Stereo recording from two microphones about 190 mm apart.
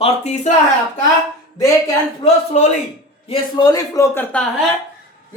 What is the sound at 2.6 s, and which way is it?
Speech, 35° left (ahead or behind).